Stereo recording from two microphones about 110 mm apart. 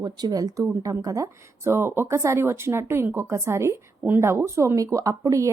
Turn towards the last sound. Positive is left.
turn(degrees=-30)  # may be behind; listen again after turning